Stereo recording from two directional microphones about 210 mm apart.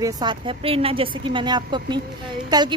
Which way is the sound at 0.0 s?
20° right (ahead or behind).